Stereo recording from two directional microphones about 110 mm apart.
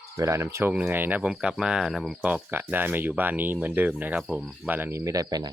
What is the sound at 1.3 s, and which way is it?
Cricket, 5° right (ahead or behind).